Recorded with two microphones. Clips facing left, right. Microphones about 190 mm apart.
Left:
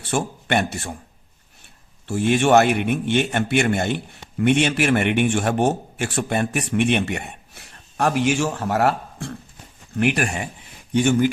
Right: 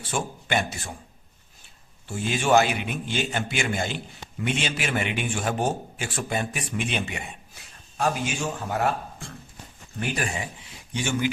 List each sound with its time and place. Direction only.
0.0 s speech: 70° left (ahead or behind)
2.0 s a man's voice: 65° left (ahead or behind)